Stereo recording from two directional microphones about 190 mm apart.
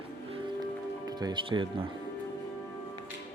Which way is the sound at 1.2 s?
25° right (ahead or behind).